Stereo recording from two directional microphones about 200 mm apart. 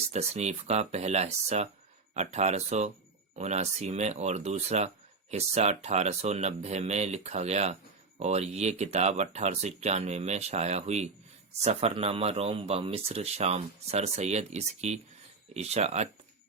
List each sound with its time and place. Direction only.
0.1 s speech: 35° right (ahead or behind)